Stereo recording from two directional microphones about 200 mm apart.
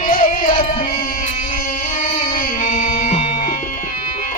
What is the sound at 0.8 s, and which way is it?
Music, 45° left (ahead or behind).